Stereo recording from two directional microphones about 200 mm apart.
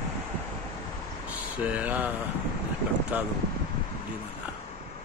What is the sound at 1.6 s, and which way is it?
Speech, 10° right (ahead or behind).